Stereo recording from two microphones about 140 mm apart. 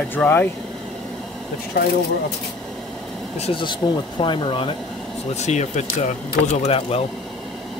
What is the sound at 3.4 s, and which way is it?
Speech, 35° left (ahead or behind).